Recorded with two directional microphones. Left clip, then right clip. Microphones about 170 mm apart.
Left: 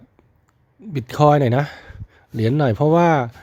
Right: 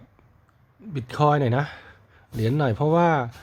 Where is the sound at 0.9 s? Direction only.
30° left (ahead or behind).